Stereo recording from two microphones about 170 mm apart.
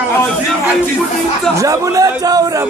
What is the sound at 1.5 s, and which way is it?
Speech, 20° right (ahead or behind).